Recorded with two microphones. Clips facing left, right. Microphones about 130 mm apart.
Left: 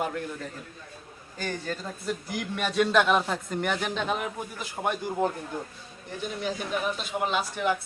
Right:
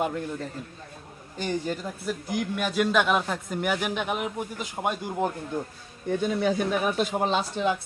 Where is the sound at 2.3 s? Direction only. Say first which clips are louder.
Right 2 dB; 5° right (ahead or behind).